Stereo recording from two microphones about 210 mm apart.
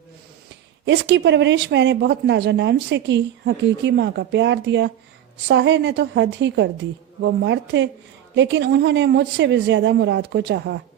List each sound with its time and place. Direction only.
0.9 s speech: 55° right (ahead or behind)